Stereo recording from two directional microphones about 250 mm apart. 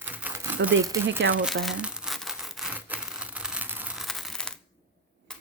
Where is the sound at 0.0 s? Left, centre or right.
Centre.